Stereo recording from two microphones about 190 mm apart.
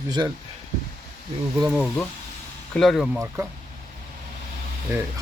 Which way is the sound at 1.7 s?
Centre (ahead or behind).